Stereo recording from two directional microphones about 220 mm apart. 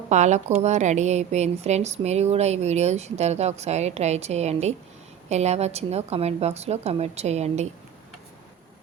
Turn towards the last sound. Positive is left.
turn(degrees=-30)  # may be behind; listen again after turning